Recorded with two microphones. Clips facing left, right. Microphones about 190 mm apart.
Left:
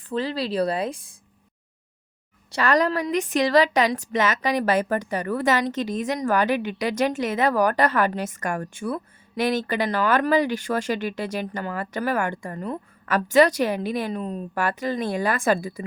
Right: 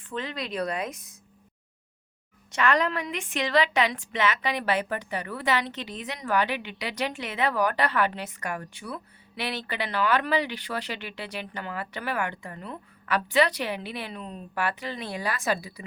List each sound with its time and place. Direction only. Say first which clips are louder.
0.1 s speech: left 7 dB; 35° left (ahead or behind)
2.5 s a woman's voice: left 4 dB; 35° left (ahead or behind)